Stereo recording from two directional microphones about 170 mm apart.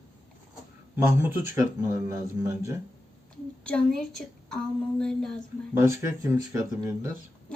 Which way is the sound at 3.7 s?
5° left (ahead or behind).